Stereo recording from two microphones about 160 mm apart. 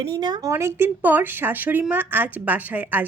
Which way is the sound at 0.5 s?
15° right (ahead or behind).